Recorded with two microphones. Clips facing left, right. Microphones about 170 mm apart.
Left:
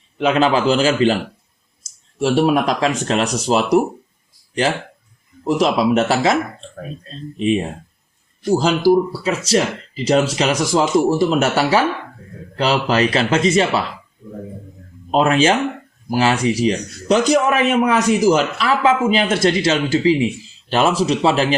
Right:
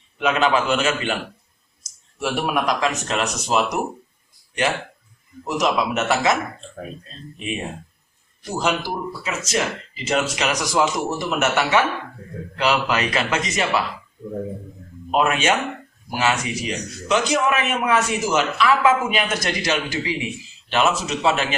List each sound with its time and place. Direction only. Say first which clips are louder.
0.2 s a man's voice: left 4 dB; 30° left (ahead or behind)
5.5 s a man's voice: left 6 dB; 30° left (ahead or behind)
8.4 s a man's voice: left 10 dB; 30° left (ahead or behind)
15.1 s a man's voice: left 5 dB; 30° left (ahead or behind)